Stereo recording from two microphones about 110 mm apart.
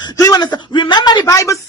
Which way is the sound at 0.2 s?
35° left (ahead or behind).